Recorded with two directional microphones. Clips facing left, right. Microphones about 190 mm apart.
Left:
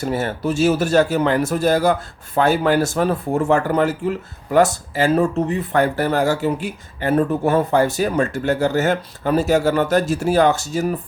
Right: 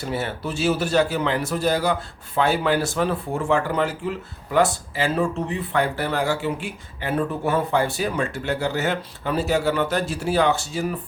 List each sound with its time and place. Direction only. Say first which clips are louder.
0.0 s speech: left 5 dB; 45° left (ahead or behind)